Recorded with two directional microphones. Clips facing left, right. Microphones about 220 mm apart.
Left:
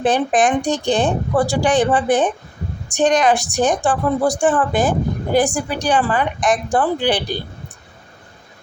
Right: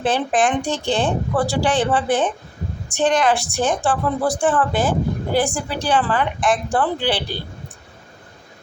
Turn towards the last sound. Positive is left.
turn(degrees=15)  # may be behind; listen again after turning